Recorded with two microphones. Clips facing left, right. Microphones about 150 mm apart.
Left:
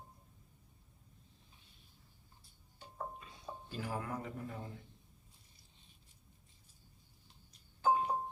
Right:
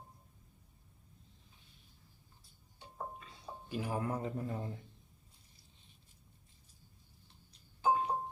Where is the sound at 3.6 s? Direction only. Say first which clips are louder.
Right 5 dB; 15° right (ahead or behind).